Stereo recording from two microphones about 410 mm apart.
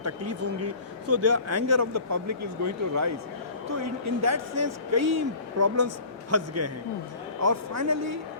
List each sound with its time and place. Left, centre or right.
0.0 s speech: right